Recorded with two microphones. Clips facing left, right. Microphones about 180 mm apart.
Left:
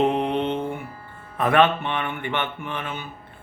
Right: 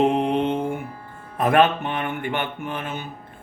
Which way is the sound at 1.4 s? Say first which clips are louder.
Right 1 dB; 40° right (ahead or behind).